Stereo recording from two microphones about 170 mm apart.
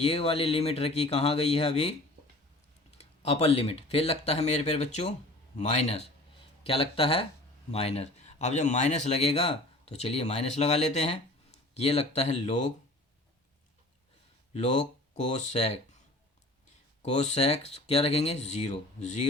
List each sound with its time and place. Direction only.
0.0 s speech: 35° left (ahead or behind)
3.0 s speech: 35° left (ahead or behind)
15.1 s speech: 40° left (ahead or behind)
17.0 s speech: 40° left (ahead or behind)